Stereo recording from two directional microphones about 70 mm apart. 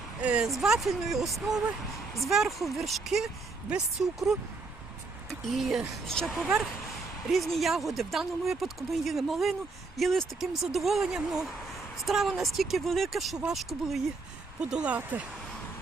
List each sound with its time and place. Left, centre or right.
0.2 s speech: centre
0.5 s speech: centre
5.5 s speech: centre
7.3 s speech: centre
14.6 s speech: centre